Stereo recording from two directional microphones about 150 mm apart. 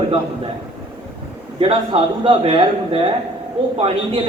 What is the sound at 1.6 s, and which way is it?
Speech, 40° right (ahead or behind).